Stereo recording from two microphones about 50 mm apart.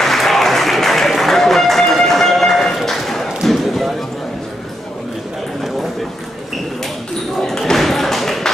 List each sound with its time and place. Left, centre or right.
0.0 s applause: centre
3.4 s basketball bounce: centre
7.4 s a sound: centre